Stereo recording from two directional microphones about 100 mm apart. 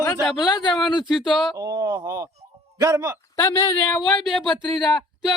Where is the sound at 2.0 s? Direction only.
35° right (ahead or behind).